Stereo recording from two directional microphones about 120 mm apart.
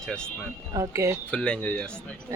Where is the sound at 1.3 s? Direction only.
10° left (ahead or behind).